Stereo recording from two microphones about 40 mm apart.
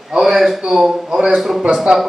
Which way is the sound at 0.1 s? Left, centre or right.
Centre.